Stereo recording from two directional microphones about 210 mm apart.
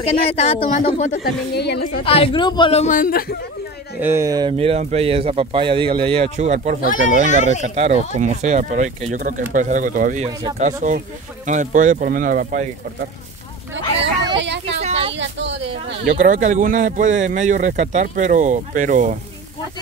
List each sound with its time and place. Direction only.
0.0 s a woman's voice: 30° left (ahead or behind); by 2.0 s 50° left (ahead or behind)
2.0 s a man's voice: 25° left (ahead or behind); by 3.3 s 45° left (ahead or behind)
4.0 s speech: 15° right (ahead or behind); by 6.8 s 35° right (ahead or behind)
7.2 s a woman's voice: 35° left (ahead or behind)
7.6 s speech: 35° right (ahead or behind)
14.4 s speech: 55° right (ahead or behind)
14.8 s a sound: 30° right (ahead or behind)
15.1 s speech: 60° right (ahead or behind)
16.2 s speech: 35° right (ahead or behind)